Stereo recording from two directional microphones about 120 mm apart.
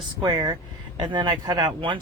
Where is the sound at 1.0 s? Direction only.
40° right (ahead or behind).